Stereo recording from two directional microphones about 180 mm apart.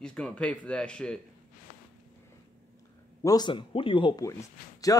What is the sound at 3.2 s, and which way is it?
Speech, 20° left (ahead or behind).